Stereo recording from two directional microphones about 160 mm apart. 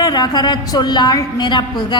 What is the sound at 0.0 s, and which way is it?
A woman's voice, 25° left (ahead or behind).